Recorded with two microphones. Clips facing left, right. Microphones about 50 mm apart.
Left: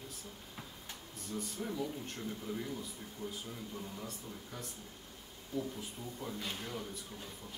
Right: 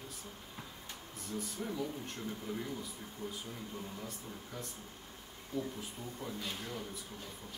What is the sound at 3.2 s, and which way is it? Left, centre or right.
Speech, right.